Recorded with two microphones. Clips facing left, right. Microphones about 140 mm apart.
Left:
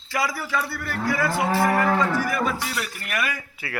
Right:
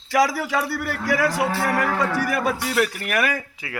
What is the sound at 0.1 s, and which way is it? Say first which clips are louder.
A man's voice: right 6 dB; 90° right.